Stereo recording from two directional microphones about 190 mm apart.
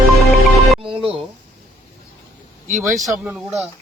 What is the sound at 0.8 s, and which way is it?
Music, 30° right (ahead or behind).